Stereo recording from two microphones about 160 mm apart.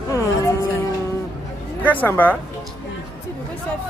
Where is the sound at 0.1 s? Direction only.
20° left (ahead or behind).